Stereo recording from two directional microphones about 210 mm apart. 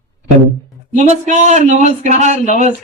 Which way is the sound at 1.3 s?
35° right (ahead or behind).